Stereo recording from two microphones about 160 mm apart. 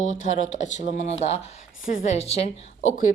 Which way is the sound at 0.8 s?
50° right (ahead or behind).